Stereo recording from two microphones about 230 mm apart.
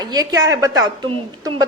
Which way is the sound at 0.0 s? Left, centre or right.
Centre.